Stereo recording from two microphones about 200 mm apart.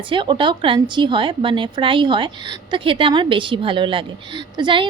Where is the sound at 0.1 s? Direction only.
25° right (ahead or behind).